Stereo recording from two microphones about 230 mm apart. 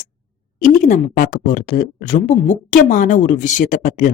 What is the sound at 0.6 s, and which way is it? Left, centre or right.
Speech, left.